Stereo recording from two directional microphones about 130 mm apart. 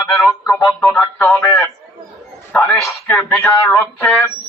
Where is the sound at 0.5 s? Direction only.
15° left (ahead or behind).